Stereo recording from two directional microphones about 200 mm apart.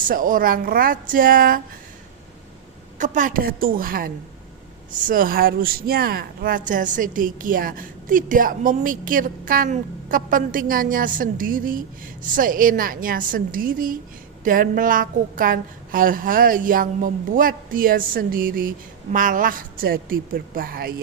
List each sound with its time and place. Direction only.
0.0 s speech: 45° right (ahead or behind)
3.0 s speech: 40° right (ahead or behind)